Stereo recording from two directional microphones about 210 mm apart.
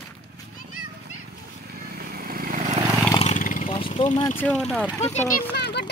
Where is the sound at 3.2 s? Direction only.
35° left (ahead or behind).